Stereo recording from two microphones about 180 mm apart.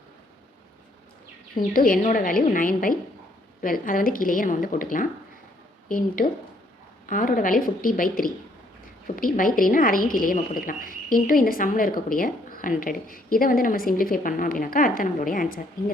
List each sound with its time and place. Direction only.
1.5 s a woman's voice: 50° left (ahead or behind)